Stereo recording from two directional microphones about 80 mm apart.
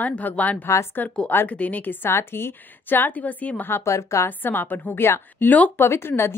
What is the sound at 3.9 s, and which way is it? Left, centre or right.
Speech, left.